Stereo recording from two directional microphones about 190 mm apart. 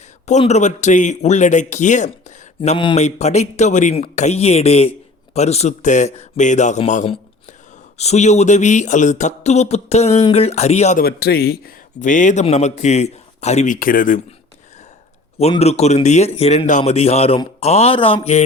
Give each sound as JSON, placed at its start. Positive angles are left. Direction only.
{"t": 0.3, "sound": "speech", "side_deg": 35}
{"t": 2.6, "sound": "speech", "side_deg": 25}
{"t": 11.0, "sound": "speech", "side_deg": 55}
{"t": 15.4, "sound": "speech", "side_deg": 35}